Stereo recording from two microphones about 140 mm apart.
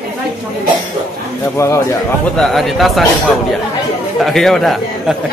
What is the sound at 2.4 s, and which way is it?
Speech, centre (ahead or behind).